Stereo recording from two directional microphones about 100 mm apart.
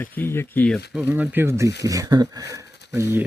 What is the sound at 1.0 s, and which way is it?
Speech, 20° right (ahead or behind).